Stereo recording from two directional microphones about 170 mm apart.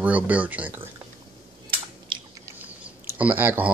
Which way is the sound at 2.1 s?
30° right (ahead or behind).